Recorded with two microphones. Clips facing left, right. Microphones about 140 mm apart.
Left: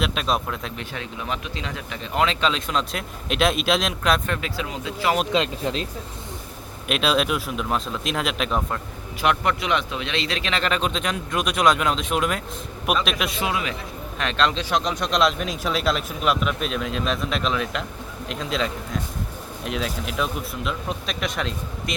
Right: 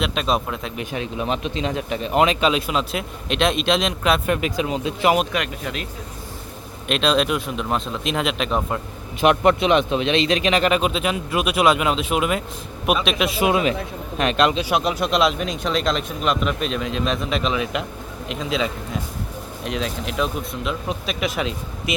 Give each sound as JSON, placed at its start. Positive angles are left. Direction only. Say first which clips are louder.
{"t": 0.0, "sound": "speech", "louder": "right 2 dB", "side_deg": 0}
{"t": 0.9, "sound": "speech", "louder": "right 7 dB", "side_deg": -20}
{"t": 4.3, "sound": "speech", "louder": "right 6 dB", "side_deg": -15}
{"t": 5.3, "sound": "speech", "louder": "left 3 dB", "side_deg": 25}
{"t": 6.8, "sound": "speech", "louder": "right 2 dB", "side_deg": 5}
{"t": 9.2, "sound": "speech", "louder": "right 6 dB", "side_deg": -20}
{"t": 13.4, "sound": "speech", "louder": "right 7 dB", "side_deg": -20}